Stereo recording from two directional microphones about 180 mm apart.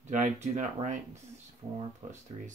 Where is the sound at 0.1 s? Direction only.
45° right (ahead or behind).